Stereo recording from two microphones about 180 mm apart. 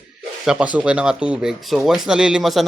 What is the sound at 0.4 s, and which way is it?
Speech, 5° right (ahead or behind).